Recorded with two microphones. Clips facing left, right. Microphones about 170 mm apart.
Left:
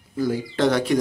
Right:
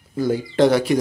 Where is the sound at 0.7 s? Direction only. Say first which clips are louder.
Right 3 dB; 5° right (ahead or behind).